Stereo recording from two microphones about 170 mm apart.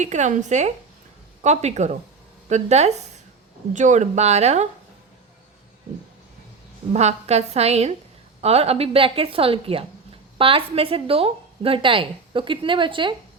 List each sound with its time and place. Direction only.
0.0 s a woman's voice: 45° right (ahead or behind)
6.9 s a woman's voice: 40° right (ahead or behind)